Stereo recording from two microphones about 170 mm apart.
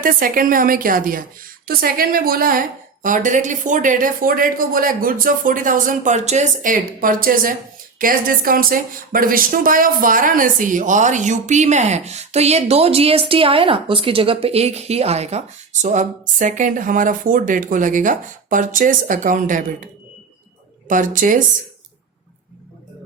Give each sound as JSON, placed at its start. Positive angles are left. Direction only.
{"t": 0.0, "sound": "a woman's voice", "side_deg": -55}